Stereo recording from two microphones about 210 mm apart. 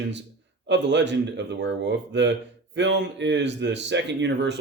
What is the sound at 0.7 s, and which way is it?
Speech, 55° right (ahead or behind).